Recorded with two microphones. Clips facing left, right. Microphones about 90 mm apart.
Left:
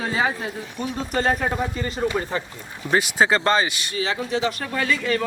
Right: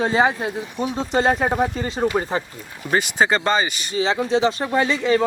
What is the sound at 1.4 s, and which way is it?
Speech, 40° right (ahead or behind).